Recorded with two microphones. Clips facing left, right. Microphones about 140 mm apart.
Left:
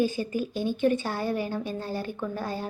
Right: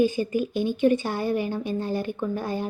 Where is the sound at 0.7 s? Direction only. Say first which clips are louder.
Right 3 dB; 15° right (ahead or behind).